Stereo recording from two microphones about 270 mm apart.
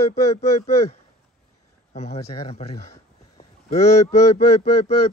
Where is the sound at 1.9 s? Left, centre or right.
Left.